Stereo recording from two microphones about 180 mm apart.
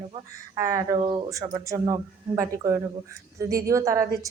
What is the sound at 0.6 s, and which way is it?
Speech, 15° right (ahead or behind).